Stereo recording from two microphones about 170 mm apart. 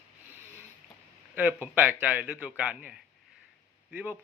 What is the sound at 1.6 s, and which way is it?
Speech, 10° right (ahead or behind).